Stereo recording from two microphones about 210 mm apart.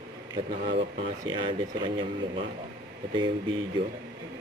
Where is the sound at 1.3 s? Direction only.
20° right (ahead or behind).